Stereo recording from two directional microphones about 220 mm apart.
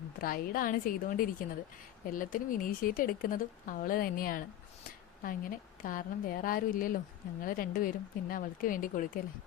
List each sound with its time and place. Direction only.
0.2 s speech: 40° left (ahead or behind)